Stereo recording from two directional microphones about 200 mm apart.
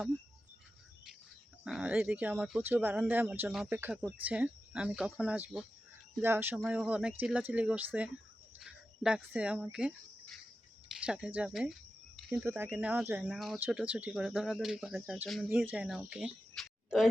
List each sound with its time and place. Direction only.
1.6 s speech: 5° right (ahead or behind)
10.8 s a sound: 5° right (ahead or behind)
11.3 s speech: 5° right (ahead or behind)